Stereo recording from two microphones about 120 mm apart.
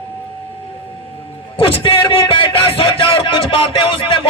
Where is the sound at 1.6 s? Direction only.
50° left (ahead or behind).